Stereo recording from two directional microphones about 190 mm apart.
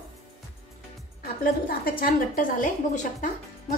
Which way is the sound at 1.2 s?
50° left (ahead or behind).